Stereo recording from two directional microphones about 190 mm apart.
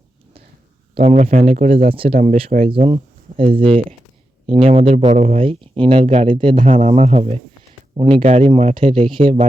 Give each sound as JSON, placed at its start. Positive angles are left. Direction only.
{"t": 0.9, "sound": "speech", "side_deg": -35}